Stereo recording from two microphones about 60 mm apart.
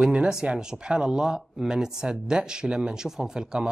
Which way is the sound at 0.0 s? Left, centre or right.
Centre.